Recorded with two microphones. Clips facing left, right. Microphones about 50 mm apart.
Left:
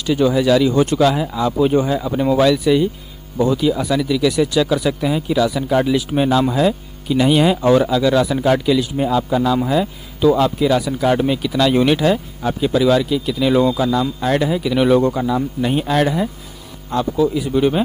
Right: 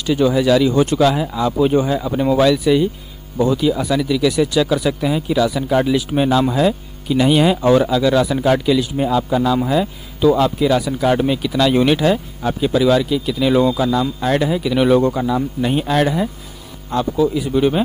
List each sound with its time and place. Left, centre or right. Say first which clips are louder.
0.0 s speech: even; centre